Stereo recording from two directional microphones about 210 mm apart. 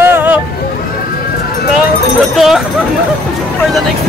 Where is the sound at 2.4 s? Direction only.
Centre (ahead or behind).